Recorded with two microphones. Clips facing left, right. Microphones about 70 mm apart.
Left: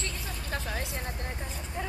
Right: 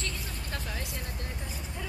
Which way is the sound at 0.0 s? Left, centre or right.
Left.